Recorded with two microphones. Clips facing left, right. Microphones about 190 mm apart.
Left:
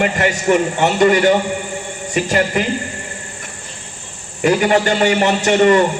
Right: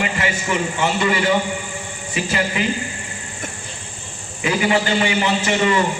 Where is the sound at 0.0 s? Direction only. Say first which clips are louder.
Left 6 dB; 45° left (ahead or behind).